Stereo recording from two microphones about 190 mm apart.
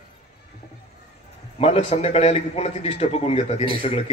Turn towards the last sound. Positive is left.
turn(degrees=30)  # may be behind; listen again after turning